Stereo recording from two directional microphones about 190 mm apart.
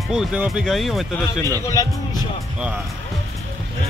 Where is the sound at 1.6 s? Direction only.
20° left (ahead or behind).